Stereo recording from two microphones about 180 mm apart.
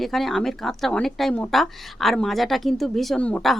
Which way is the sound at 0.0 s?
Centre (ahead or behind).